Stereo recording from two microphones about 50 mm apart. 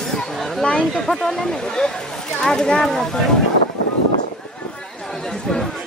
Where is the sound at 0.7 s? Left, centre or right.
Centre.